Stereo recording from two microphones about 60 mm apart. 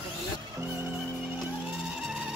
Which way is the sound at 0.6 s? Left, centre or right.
Right.